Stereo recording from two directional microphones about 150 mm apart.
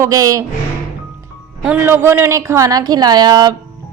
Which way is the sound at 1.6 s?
10° right (ahead or behind).